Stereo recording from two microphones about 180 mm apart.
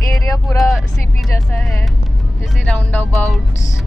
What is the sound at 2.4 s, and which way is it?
Speech, 5° left (ahead or behind).